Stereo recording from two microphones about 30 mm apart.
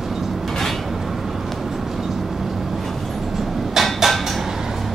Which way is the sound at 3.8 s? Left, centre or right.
Centre.